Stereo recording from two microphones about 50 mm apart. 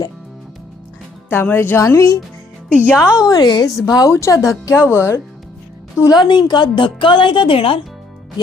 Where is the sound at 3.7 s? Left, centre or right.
Left.